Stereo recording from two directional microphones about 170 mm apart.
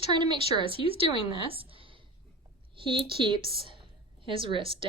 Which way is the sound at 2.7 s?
30° right (ahead or behind).